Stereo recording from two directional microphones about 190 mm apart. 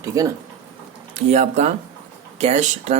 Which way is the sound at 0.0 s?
15° right (ahead or behind).